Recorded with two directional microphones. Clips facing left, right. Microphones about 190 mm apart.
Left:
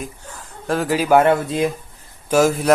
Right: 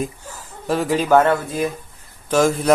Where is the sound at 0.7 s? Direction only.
Centre (ahead or behind); by 1.7 s 20° left (ahead or behind).